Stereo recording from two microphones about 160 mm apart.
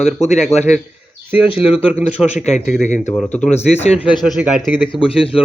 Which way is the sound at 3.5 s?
45° left (ahead or behind).